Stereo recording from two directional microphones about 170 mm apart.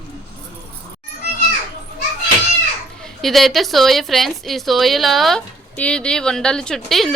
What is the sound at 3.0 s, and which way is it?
Speech, centre (ahead or behind).